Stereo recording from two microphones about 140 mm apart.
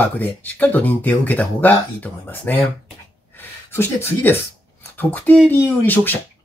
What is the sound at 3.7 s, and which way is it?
Speech, 15° left (ahead or behind).